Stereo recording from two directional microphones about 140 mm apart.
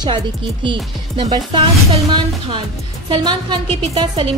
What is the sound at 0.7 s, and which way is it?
A woman's voice, 35° right (ahead or behind).